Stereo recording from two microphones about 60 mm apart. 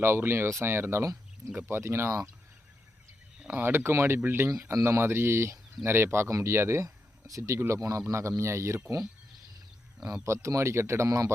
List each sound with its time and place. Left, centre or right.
0.0 s speech: right
3.4 s speech: right
6.8 s a sound: right
7.7 s speech: right
10.2 s speech: right